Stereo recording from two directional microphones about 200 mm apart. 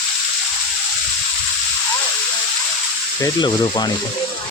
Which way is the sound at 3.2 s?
20° left (ahead or behind).